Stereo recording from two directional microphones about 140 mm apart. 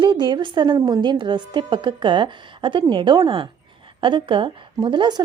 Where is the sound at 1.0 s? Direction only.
35° right (ahead or behind).